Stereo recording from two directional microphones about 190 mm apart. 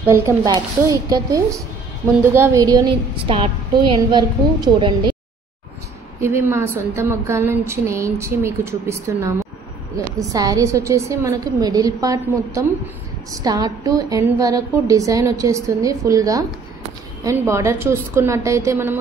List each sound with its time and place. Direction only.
0.0 s a woman's voice: 15° right (ahead or behind)
6.2 s a woman's voice: 15° right (ahead or behind)